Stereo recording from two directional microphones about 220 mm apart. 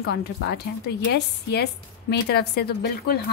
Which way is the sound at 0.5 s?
50° left (ahead or behind).